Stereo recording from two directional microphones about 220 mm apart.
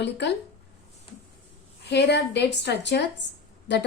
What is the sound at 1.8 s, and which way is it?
A woman's voice, 50° left (ahead or behind).